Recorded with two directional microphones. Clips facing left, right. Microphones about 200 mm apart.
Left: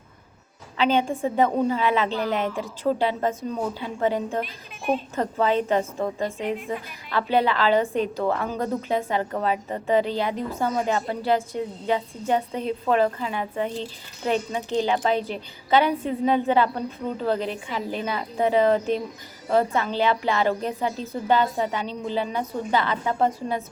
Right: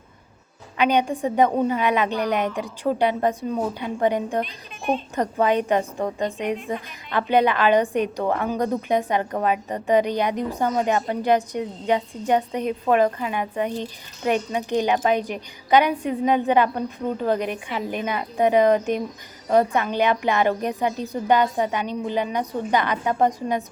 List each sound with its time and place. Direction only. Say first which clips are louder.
0.8 s a woman's voice: right 1 dB; 15° right (ahead or behind)
4.4 s speech: right 1 dB; 5° left (ahead or behind)
5.1 s a woman's voice: right 3 dB; 15° right (ahead or behind)